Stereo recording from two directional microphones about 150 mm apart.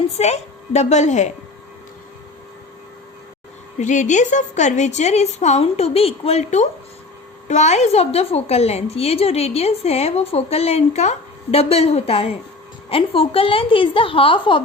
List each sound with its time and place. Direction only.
0.2 s a woman's voice: 45° left (ahead or behind)
3.8 s a woman's voice: 55° left (ahead or behind); by 14.6 s 35° left (ahead or behind)